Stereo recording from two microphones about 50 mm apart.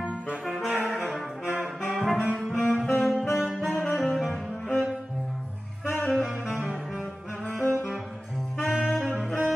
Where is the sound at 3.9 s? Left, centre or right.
Centre.